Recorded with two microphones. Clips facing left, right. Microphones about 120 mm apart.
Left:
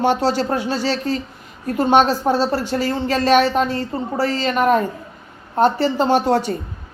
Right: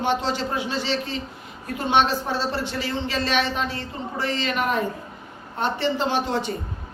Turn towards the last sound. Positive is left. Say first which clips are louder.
# left 7 dB
turn(degrees=45)  # may be behind; listen again after turning